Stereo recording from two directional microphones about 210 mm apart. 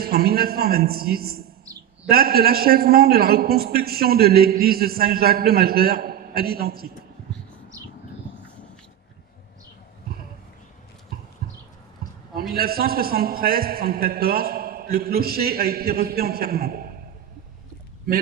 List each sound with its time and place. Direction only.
0.0 s a man's voice: 45° right (ahead or behind)
12.3 s a man's voice: 45° right (ahead or behind)